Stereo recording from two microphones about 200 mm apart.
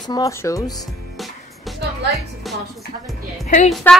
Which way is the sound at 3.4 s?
40° left (ahead or behind).